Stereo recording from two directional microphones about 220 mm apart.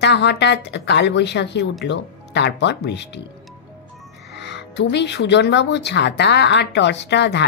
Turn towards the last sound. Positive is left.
turn(degrees=50)  # may be behind; listen again after turning